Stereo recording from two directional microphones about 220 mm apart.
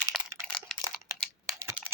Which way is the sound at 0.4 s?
5° left (ahead or behind).